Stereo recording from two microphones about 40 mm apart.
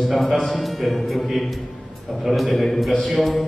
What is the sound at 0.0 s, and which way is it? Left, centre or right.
A man's voice, centre.